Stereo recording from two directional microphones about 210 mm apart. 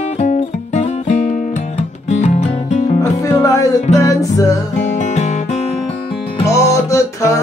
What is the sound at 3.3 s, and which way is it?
Music, 15° left (ahead or behind).